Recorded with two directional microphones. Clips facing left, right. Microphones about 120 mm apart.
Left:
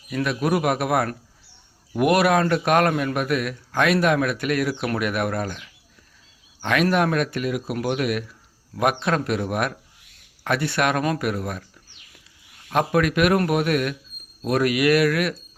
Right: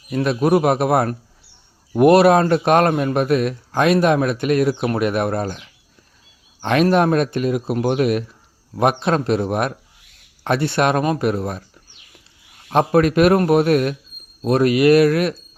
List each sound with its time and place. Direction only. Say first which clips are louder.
0.1 s speech: right 6 dB; 30° right (ahead or behind)
12.7 s speech: right 5 dB; 30° right (ahead or behind)